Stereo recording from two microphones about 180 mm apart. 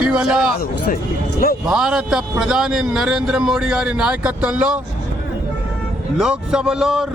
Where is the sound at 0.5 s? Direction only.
55° left (ahead or behind).